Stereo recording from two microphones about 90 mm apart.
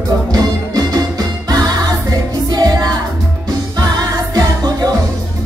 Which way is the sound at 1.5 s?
45° right (ahead or behind).